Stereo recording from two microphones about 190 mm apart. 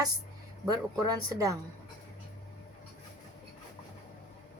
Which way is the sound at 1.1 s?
20° right (ahead or behind).